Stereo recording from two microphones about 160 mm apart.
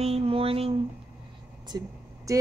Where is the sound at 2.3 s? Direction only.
20° right (ahead or behind).